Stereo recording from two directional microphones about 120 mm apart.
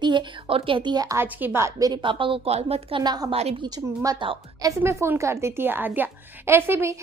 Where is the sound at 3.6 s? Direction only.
30° right (ahead or behind).